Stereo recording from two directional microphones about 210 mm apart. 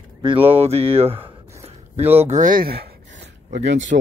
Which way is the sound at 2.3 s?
40° right (ahead or behind).